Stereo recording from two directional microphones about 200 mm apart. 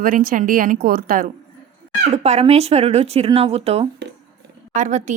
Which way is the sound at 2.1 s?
30° right (ahead or behind).